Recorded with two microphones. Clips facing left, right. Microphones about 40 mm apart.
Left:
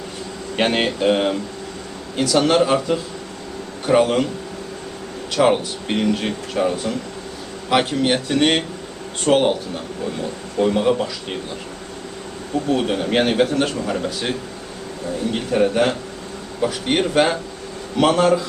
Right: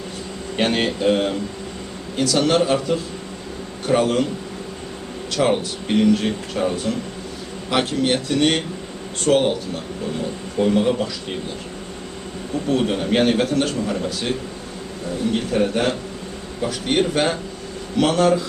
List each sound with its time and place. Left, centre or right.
0.5 s a man's voice: centre
5.4 s a man's voice: centre
10.6 s a man's voice: centre
12.7 s a man's voice: centre
15.5 s a man's voice: centre